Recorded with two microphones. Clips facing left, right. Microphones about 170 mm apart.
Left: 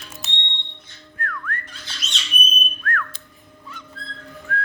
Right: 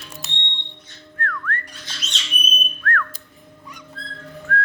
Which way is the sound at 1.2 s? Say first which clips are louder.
Right 3 dB; 10° left (ahead or behind).